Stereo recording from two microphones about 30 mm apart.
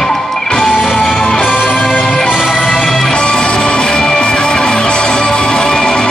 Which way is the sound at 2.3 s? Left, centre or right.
Centre.